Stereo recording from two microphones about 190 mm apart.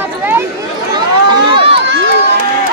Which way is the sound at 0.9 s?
25° right (ahead or behind).